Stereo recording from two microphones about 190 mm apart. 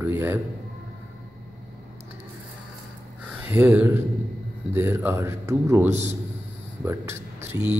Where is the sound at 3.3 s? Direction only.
10° right (ahead or behind).